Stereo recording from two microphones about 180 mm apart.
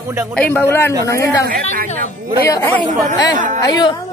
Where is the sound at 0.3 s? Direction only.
10° left (ahead or behind).